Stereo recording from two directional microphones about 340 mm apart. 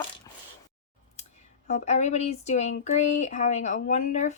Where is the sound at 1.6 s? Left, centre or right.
Centre.